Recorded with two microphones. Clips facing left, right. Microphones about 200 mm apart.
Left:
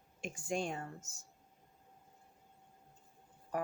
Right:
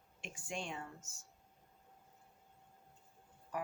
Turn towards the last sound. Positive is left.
turn(degrees=40)  # may be behind; listen again after turning